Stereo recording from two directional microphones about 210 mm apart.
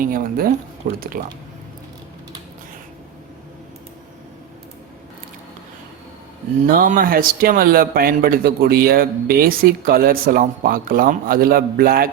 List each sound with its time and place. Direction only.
0.0 s a man's voice: 45° right (ahead or behind)
6.7 s a man's voice: 40° right (ahead or behind)